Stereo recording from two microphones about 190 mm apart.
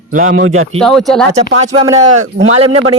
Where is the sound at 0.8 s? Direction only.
Centre (ahead or behind).